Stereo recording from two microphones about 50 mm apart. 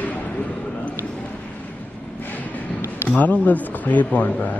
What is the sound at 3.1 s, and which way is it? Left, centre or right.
Speech, left.